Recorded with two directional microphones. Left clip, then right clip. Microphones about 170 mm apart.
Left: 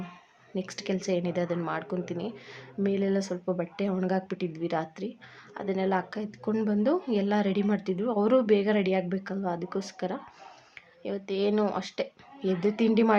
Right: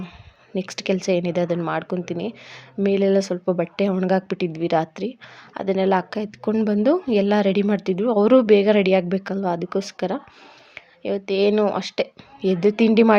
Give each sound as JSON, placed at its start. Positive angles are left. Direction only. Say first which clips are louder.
{"t": 0.5, "sound": "a woman's voice", "louder": "right 9 dB", "side_deg": -40}